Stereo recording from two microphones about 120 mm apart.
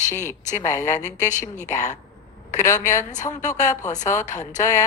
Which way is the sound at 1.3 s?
90° left.